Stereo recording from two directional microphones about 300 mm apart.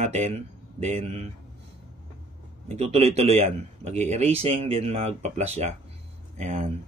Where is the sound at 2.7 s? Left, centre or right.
Right.